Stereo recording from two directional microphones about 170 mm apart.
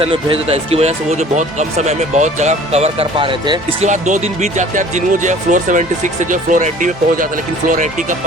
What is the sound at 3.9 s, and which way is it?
Speech, 45° right (ahead or behind).